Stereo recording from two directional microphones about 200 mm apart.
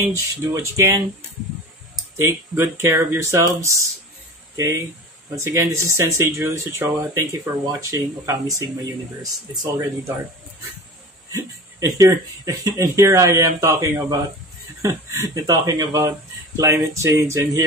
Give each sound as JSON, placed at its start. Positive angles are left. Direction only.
{"t": 0.0, "sound": "speech", "side_deg": -15}
{"t": 2.1, "sound": "speech", "side_deg": -15}
{"t": 5.4, "sound": "speech", "side_deg": -15}
{"t": 11.3, "sound": "speech", "side_deg": -15}